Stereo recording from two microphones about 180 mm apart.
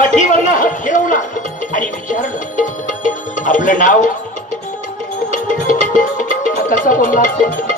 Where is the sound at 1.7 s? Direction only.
45° left (ahead or behind).